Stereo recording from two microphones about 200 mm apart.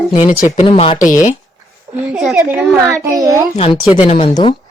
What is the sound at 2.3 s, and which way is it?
A child's voice, 5° right (ahead or behind).